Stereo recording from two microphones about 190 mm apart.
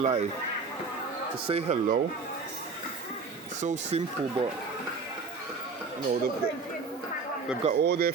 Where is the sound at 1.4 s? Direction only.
30° right (ahead or behind).